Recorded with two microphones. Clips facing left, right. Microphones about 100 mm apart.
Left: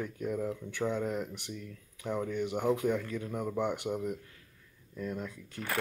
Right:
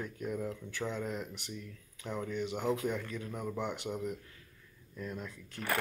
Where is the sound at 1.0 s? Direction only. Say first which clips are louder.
Left 4 dB; 55° left (ahead or behind).